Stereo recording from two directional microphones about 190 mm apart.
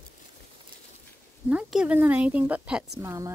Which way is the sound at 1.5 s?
5° right (ahead or behind).